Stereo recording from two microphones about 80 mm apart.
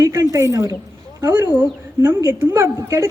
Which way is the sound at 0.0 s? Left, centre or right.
Right.